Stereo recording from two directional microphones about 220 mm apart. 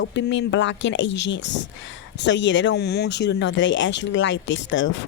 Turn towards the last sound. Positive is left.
turn(degrees=60)  # may be behind; listen again after turning